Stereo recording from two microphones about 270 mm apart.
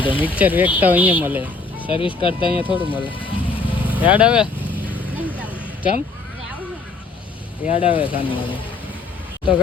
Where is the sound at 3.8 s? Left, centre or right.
Centre.